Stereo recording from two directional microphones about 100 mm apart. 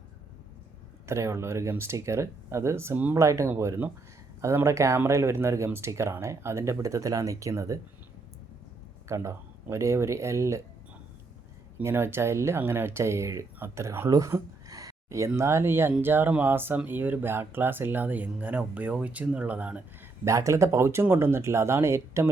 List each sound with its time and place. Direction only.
1.0 s speech: 30° right (ahead or behind)
3.2 s speech: 30° right (ahead or behind)
9.0 s speech: 30° right (ahead or behind)
11.8 s speech: 25° right (ahead or behind)
14.1 s a sound: 30° right (ahead or behind)
15.4 s speech: 30° right (ahead or behind)
20.2 s speech: 30° right (ahead or behind)